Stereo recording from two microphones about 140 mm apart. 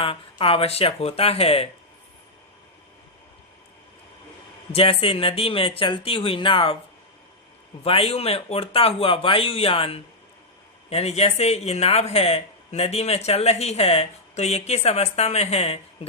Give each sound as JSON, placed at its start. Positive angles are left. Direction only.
{"t": 0.0, "sound": "speech", "side_deg": 40}
{"t": 4.7, "sound": "speech", "side_deg": 40}
{"t": 7.9, "sound": "speech", "side_deg": 45}